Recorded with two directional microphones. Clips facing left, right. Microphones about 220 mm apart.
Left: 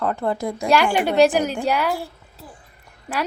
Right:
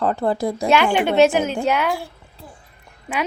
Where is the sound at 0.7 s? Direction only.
Centre (ahead or behind).